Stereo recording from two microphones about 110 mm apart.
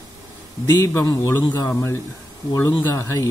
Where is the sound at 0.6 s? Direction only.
20° left (ahead or behind).